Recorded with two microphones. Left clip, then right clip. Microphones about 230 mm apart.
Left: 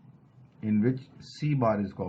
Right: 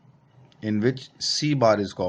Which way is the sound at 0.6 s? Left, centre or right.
Right.